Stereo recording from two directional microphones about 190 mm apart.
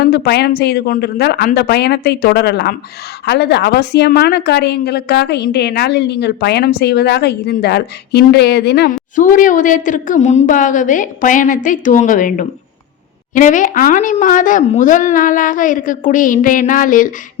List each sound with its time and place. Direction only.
0.0 s a woman's voice: 60° left (ahead or behind)